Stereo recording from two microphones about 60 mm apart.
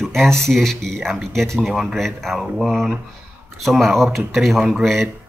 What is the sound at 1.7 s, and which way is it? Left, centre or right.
Speech, centre.